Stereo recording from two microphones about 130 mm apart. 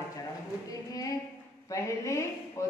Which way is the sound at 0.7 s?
25° left (ahead or behind).